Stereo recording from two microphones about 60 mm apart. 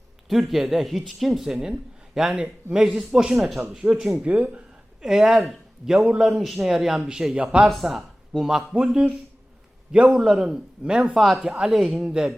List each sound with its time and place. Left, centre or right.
0.3 s speech: centre
1.5 s a man's voice: centre
2.2 s a man's voice: centre
4.2 s speech: right
5.0 s a man's voice: centre
7.7 s a man's voice: centre
9.9 s a man's voice: centre
11.1 s a man's voice: centre